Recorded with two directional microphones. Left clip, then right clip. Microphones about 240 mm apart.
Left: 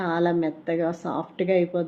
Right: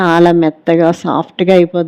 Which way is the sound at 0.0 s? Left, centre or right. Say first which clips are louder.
Right 14 dB; right.